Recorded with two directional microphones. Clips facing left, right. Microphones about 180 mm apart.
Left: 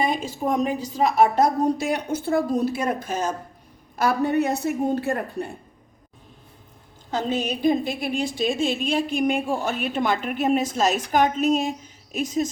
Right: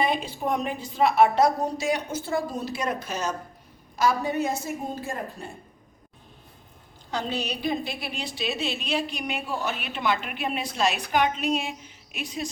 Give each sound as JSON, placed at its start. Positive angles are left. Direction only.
{"t": 0.0, "sound": "a woman's voice", "side_deg": 45}
{"t": 7.1, "sound": "a woman's voice", "side_deg": 45}